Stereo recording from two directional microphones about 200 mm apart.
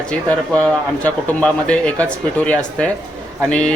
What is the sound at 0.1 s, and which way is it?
Speech, 5° left (ahead or behind).